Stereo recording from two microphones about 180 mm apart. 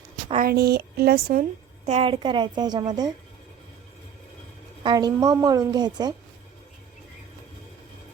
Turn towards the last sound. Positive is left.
turn(degrees=-20)  # may be behind; listen again after turning